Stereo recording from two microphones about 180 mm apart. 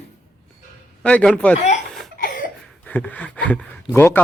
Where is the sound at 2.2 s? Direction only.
50° left (ahead or behind).